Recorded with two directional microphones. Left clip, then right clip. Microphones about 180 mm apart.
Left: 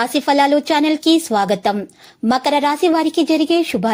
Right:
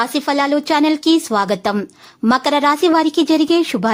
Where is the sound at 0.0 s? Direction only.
Centre (ahead or behind).